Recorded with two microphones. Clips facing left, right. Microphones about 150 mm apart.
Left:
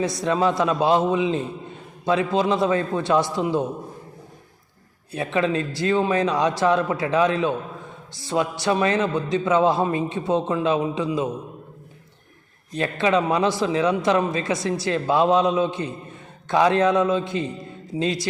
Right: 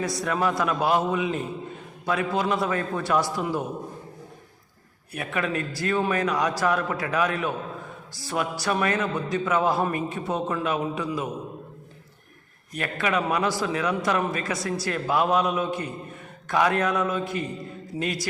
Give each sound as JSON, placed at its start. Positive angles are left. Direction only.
{"t": 0.0, "sound": "a man's voice", "side_deg": 20}
{"t": 5.1, "sound": "a man's voice", "side_deg": 25}
{"t": 12.7, "sound": "a man's voice", "side_deg": 25}